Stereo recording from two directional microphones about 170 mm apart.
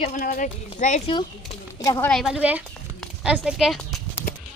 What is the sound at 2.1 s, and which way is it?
Speech, centre (ahead or behind).